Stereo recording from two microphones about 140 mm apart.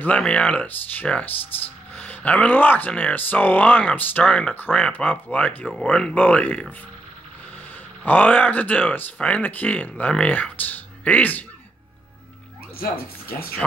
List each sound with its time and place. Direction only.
0.0 s speech: 10° left (ahead or behind)
8.0 s speech: 10° left (ahead or behind)
12.7 s speech: 90° left